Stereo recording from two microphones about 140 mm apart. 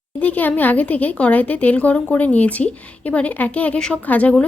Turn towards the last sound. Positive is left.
turn(degrees=10)  # may be behind; listen again after turning